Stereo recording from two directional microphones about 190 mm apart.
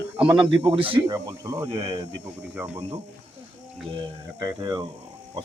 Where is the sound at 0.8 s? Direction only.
30° right (ahead or behind).